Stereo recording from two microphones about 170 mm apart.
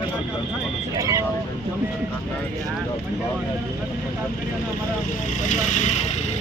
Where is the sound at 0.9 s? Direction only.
20° right (ahead or behind).